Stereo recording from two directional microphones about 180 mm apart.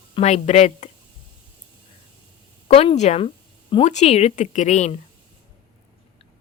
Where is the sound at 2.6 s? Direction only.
35° left (ahead or behind).